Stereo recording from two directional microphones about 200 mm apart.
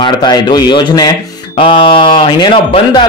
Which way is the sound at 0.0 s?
20° left (ahead or behind).